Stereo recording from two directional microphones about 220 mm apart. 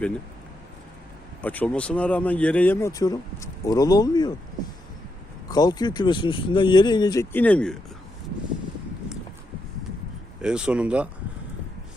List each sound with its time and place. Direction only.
1.4 s speech: 5° left (ahead or behind)
5.5 s speech: 15° left (ahead or behind)
10.4 s speech: 5° right (ahead or behind)